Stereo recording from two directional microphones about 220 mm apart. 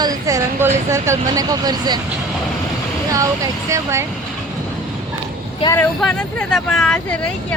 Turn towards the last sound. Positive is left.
turn(degrees=5)  # may be behind; listen again after turning